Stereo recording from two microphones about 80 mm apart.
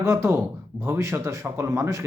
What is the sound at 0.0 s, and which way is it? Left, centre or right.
Speech, right.